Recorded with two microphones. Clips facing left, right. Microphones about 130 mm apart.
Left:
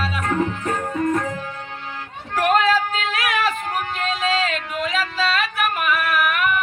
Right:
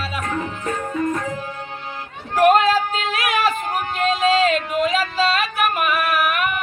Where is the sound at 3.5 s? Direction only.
15° right (ahead or behind).